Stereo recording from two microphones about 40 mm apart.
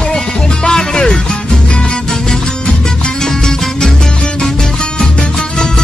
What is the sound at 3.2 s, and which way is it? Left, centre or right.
Music, centre.